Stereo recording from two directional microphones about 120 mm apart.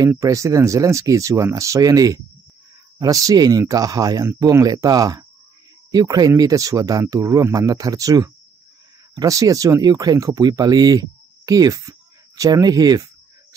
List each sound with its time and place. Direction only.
0.2 s speech: 25° right (ahead or behind)